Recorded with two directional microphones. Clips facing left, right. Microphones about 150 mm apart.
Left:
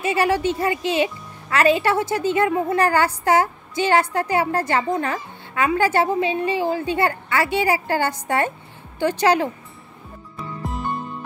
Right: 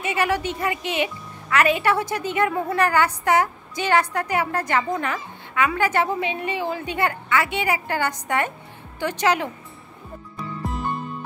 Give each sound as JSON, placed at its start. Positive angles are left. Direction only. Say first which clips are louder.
{"t": 0.0, "sound": "a child's voice", "louder": "left 4 dB", "side_deg": 35}
{"t": 10.3, "sound": "music", "louder": "even", "side_deg": 0}